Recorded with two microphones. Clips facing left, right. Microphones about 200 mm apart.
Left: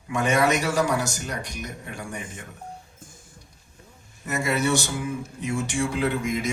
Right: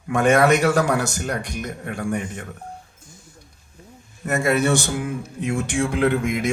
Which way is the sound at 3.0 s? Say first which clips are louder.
Right 1 dB; 50° left (ahead or behind).